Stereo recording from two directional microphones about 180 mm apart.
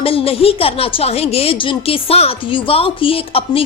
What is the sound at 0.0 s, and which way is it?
A woman's voice, 30° left (ahead or behind).